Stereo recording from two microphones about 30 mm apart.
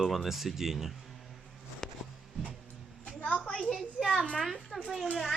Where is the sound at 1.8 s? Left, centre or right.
Centre.